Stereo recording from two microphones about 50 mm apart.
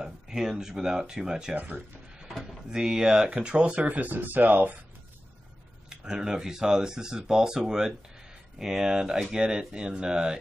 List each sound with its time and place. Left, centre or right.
0.0 s speech: centre
2.7 s speech: centre; by 4.7 s right
5.9 s speech: centre